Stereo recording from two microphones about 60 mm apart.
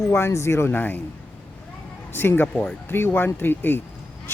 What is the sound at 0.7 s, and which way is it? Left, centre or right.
Speech, left.